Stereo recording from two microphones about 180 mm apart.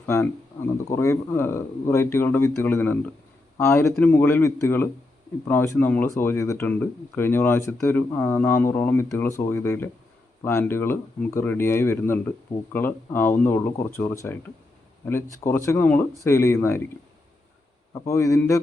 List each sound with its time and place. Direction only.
0.1 s speech: 15° left (ahead or behind)
17.9 s speech: 15° left (ahead or behind)